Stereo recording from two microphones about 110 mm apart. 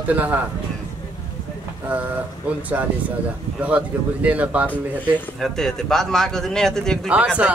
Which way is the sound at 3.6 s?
10° right (ahead or behind).